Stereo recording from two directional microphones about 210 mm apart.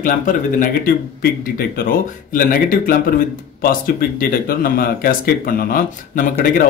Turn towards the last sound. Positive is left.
turn(degrees=40)  # may be behind; listen again after turning